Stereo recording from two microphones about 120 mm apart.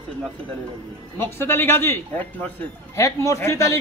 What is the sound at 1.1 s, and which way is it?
A man's voice, 20° left (ahead or behind).